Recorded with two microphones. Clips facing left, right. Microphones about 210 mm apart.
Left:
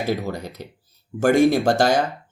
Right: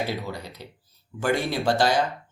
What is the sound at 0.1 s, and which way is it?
Speech, 45° left (ahead or behind).